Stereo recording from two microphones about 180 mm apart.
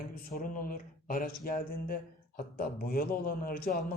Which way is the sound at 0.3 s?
50° left (ahead or behind).